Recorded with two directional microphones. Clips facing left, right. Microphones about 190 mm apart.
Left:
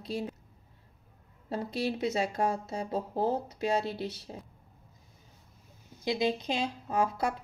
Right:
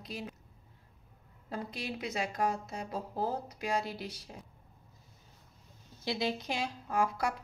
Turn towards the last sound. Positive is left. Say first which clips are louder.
# left 2 dB
turn(degrees=25)  # may be behind; listen again after turning